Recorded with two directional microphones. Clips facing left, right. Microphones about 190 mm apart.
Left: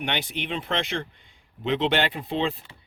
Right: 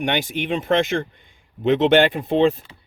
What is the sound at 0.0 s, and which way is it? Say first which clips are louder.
Speech: right 7 dB; 50° right (ahead or behind).